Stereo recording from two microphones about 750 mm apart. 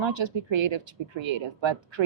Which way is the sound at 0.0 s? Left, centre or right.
Right.